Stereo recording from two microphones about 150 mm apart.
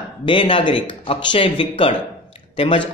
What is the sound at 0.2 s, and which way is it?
A man's voice, 35° left (ahead or behind).